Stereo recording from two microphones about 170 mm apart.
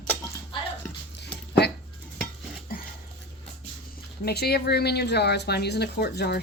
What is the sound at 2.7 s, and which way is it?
Dog, 60° left (ahead or behind).